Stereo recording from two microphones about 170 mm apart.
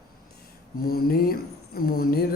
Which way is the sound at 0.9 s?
65° left (ahead or behind).